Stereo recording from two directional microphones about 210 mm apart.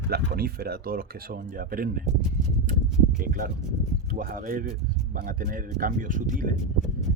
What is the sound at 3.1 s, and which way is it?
Speech, 40° right (ahead or behind).